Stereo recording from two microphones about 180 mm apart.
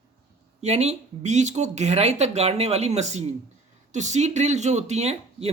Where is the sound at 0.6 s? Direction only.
35° right (ahead or behind).